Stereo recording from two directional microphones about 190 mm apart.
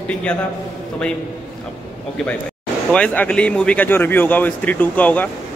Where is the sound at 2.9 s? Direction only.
5° left (ahead or behind).